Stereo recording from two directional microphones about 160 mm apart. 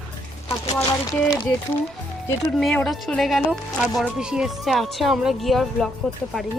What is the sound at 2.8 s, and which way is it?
Speech, centre (ahead or behind).